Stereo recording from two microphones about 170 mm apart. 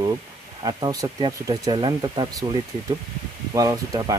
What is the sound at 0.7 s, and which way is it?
Speech, 25° right (ahead or behind).